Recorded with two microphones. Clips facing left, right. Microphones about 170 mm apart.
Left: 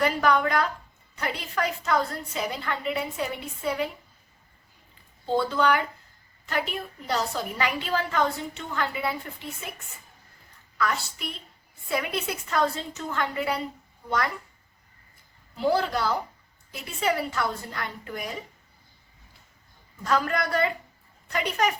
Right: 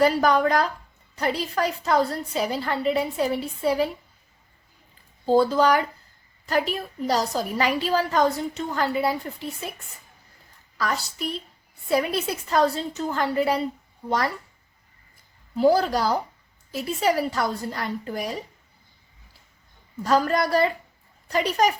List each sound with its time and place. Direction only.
0.0 s a woman's voice: 35° right (ahead or behind)
5.2 s a woman's voice: 40° right (ahead or behind)
10.8 s a woman's voice: 35° right (ahead or behind)
15.5 s a woman's voice: 40° right (ahead or behind)
20.1 s a woman's voice: 35° right (ahead or behind)